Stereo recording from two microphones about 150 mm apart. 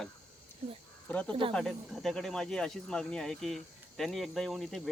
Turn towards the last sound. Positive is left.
turn(degrees=0)  # may be behind; listen again after turning